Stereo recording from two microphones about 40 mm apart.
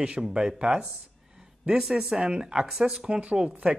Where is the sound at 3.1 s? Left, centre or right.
Right.